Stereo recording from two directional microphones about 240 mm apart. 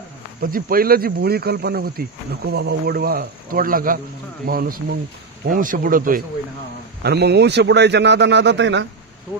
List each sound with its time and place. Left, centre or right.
0.4 s a man's voice: right